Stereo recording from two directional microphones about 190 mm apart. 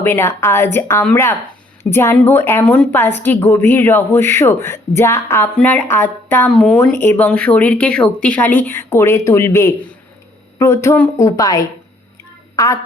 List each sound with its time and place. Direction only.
0.0 s speech: 10° left (ahead or behind)